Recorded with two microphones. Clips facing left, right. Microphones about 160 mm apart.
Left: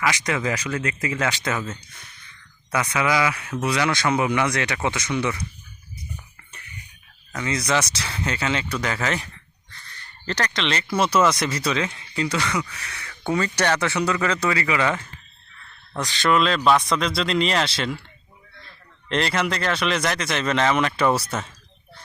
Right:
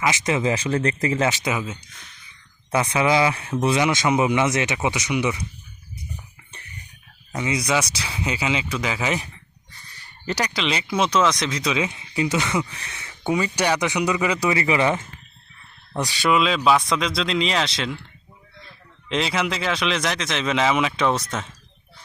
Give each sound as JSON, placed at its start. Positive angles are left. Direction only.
{"t": 0.0, "sound": "speech", "side_deg": -20}
{"t": 1.3, "sound": "speech", "side_deg": -15}
{"t": 2.7, "sound": "speech", "side_deg": -25}
{"t": 7.3, "sound": "speech", "side_deg": -15}
{"t": 11.9, "sound": "speech", "side_deg": -20}